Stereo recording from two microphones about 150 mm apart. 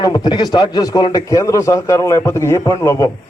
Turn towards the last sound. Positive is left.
turn(degrees=20)  # may be behind; listen again after turning